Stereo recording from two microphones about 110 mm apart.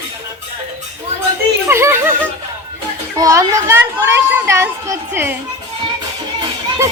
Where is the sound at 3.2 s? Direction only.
30° right (ahead or behind).